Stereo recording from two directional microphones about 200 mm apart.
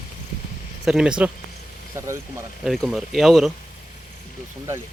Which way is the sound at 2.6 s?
Centre (ahead or behind).